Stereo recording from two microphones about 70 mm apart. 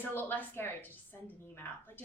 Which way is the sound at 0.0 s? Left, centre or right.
Left.